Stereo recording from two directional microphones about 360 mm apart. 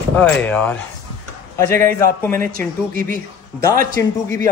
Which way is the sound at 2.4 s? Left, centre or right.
Right.